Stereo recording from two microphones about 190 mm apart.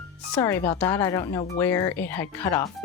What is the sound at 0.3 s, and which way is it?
Speech, 15° left (ahead or behind).